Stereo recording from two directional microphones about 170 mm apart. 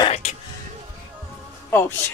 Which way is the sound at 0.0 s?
40° left (ahead or behind).